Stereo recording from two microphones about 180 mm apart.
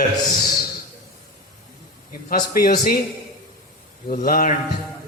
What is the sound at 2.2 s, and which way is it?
Speech, 55° left (ahead or behind).